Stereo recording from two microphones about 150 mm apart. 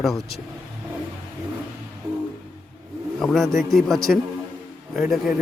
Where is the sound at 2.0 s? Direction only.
20° right (ahead or behind).